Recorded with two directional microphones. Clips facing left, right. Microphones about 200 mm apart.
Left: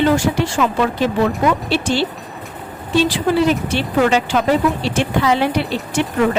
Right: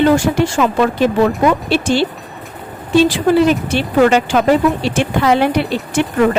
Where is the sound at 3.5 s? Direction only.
55° right (ahead or behind).